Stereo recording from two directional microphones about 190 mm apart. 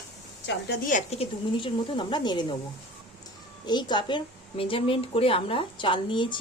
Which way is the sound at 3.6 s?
20° left (ahead or behind).